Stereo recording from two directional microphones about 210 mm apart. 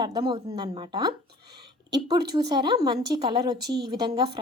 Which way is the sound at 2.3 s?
20° right (ahead or behind).